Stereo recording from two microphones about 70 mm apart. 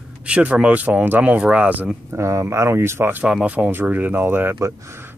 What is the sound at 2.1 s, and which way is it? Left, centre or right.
Speech, right.